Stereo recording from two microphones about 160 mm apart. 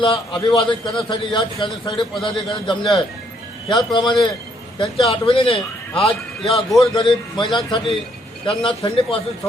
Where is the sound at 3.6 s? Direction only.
25° left (ahead or behind).